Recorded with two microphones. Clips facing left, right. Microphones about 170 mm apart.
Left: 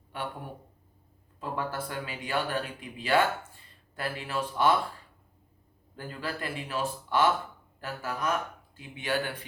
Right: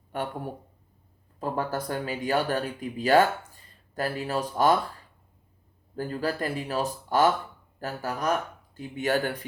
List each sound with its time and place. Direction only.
0.1 s speech: 45° right (ahead or behind)
1.4 s speech: 40° right (ahead or behind)
6.0 s speech: 40° right (ahead or behind)